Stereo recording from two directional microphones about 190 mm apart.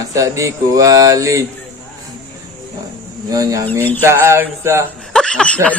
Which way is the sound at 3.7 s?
10° left (ahead or behind).